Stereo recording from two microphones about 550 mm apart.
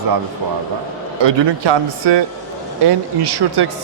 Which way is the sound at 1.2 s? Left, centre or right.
Right.